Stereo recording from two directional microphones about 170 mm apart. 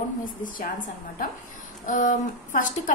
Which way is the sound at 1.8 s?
50° left (ahead or behind).